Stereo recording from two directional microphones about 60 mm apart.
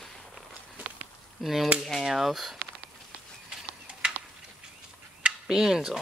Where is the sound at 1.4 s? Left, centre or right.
Centre.